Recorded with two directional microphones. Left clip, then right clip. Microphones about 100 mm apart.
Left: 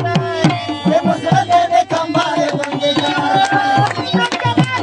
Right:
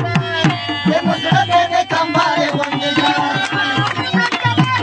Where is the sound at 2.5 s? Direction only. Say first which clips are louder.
Left 1 dB; 45° left (ahead or behind).